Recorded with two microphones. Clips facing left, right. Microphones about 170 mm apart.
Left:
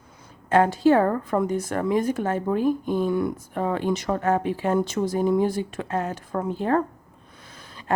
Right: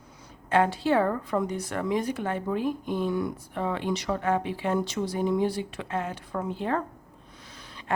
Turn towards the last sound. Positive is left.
turn(degrees=45)  # may be behind; listen again after turning